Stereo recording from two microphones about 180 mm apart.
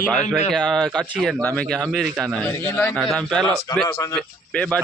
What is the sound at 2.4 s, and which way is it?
Speech, 15° left (ahead or behind).